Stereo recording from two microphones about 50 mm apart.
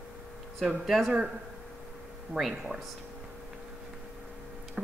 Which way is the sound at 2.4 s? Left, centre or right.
Centre.